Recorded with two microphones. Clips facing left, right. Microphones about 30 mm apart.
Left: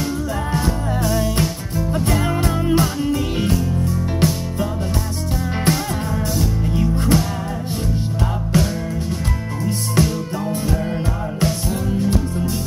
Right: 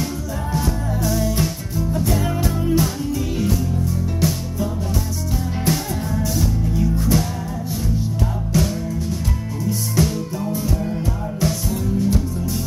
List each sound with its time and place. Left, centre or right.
1.0 s music: centre
1.9 s music: left
5.7 s music: left
8.5 s music: left
10.0 s music: left